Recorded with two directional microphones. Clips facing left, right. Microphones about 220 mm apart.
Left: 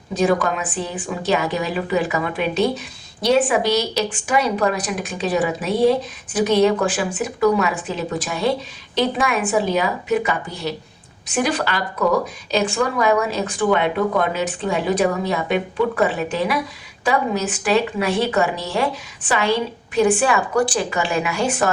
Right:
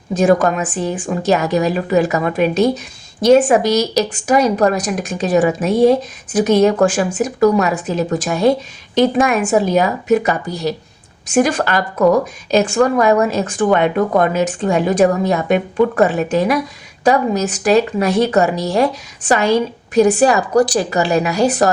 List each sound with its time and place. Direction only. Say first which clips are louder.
0.1 s speech: right 5 dB; 45° right (ahead or behind)